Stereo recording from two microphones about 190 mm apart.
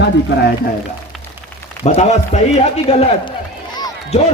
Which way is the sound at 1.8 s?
35° left (ahead or behind).